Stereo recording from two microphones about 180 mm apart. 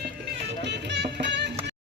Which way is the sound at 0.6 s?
70° right (ahead or behind).